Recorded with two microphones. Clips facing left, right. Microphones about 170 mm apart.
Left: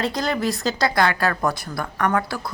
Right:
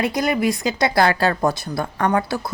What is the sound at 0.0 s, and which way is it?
Speech, 20° right (ahead or behind).